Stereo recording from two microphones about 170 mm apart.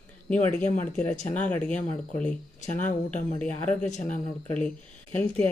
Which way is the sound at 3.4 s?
5° left (ahead or behind).